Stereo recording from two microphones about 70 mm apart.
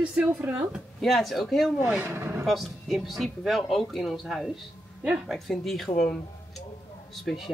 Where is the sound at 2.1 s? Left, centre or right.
Right.